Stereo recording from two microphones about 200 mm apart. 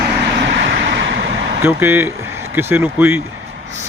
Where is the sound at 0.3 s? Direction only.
60° right (ahead or behind).